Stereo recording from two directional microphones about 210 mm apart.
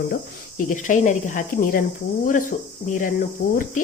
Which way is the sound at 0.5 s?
40° left (ahead or behind).